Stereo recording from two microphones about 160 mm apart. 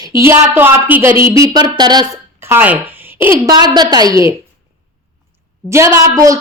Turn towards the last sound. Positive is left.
turn(degrees=-20)  # may be behind; listen again after turning